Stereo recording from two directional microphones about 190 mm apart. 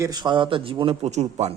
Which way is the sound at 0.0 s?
20° right (ahead or behind).